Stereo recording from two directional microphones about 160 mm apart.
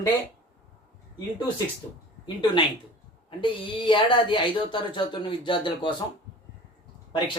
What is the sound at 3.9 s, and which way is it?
Speech, 30° left (ahead or behind).